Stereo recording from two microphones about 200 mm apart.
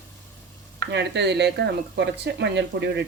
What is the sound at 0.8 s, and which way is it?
Speech, 60° right (ahead or behind).